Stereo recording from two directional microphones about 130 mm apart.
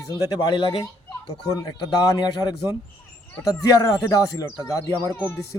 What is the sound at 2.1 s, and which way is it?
Speech, 35° left (ahead or behind).